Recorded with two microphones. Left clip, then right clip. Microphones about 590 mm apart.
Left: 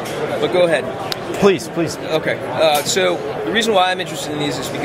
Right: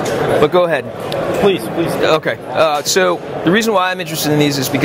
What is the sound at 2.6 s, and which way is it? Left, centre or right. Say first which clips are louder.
A man's voice: left 1 dB; right.